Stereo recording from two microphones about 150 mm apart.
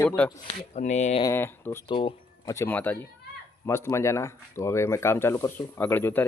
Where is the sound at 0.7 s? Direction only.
50° left (ahead or behind).